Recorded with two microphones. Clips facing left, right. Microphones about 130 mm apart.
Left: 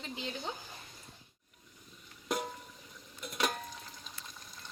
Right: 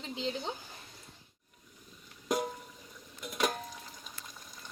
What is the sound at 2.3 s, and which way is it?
Music, 10° right (ahead or behind).